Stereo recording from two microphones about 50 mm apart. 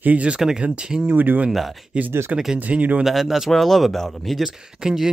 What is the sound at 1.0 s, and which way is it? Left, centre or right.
Speech, right.